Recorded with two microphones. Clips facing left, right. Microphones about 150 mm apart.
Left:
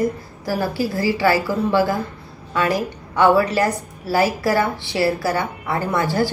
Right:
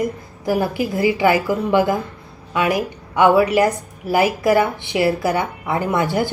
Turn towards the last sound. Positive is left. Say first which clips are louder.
# right 1 dB
turn(degrees=-20)  # may be behind; listen again after turning